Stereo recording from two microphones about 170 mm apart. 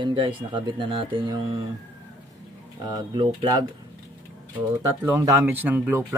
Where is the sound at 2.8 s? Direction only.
25° right (ahead or behind).